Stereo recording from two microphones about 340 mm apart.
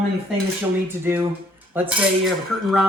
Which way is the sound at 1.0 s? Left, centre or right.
Centre.